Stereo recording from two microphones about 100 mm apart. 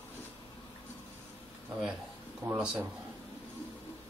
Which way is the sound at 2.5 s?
10° right (ahead or behind).